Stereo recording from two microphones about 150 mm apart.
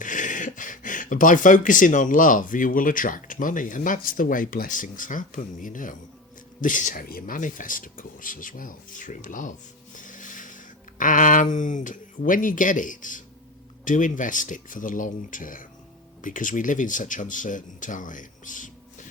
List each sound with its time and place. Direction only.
0.0 s speech: 60° left (ahead or behind)